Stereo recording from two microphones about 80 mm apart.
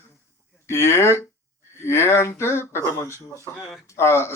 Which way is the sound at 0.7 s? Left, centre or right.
Left.